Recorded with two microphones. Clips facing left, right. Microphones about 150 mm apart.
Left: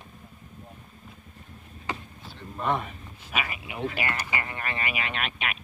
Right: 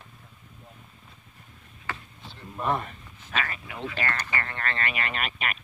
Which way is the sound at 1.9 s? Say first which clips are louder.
Left 3 dB; 15° left (ahead or behind).